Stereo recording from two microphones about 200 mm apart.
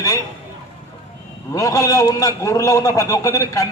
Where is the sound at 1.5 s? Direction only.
15° left (ahead or behind).